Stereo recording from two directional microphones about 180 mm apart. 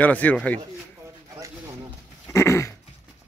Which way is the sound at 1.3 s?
15° right (ahead or behind).